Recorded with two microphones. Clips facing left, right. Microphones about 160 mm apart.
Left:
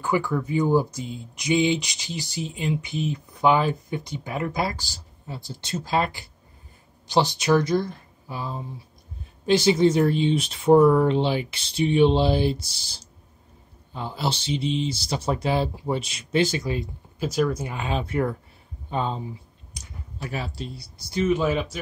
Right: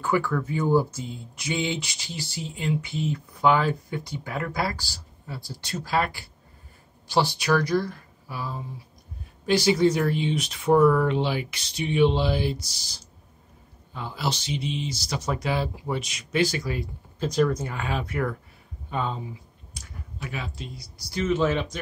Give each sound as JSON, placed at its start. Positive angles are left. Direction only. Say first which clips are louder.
{"t": 0.0, "sound": "speech", "louder": "left 1 dB", "side_deg": 15}
{"t": 17.2, "sound": "speech", "louder": "right 1 dB", "side_deg": 5}
{"t": 21.1, "sound": "speech", "louder": "left 1 dB", "side_deg": 15}